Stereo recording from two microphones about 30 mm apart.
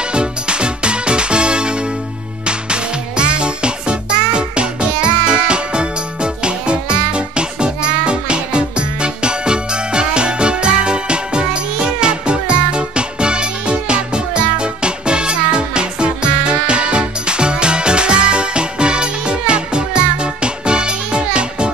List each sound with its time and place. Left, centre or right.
0.0 s music: right